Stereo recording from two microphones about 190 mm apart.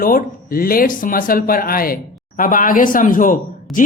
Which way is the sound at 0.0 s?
50° left (ahead or behind).